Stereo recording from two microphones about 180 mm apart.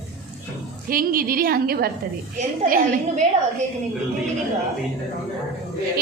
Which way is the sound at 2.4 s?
45° right (ahead or behind).